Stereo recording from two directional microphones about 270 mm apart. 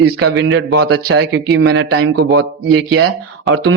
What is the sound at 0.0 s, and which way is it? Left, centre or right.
Speech, right.